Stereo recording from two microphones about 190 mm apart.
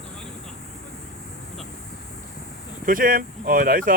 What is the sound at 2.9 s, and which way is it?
Speech, 45° right (ahead or behind).